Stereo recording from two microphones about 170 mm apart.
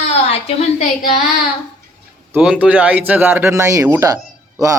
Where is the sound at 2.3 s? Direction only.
5° right (ahead or behind).